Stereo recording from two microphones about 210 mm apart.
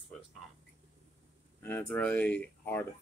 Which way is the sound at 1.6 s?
10° left (ahead or behind).